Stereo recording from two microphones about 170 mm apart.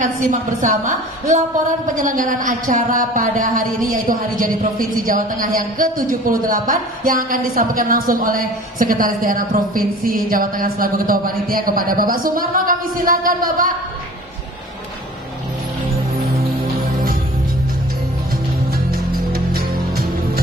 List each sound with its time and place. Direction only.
0.0 s a woman's voice: 50° right (ahead or behind)
18.9 s music: 60° right (ahead or behind)